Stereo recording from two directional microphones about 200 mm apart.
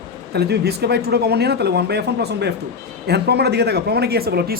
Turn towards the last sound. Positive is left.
turn(degrees=-50)  # may be behind; listen again after turning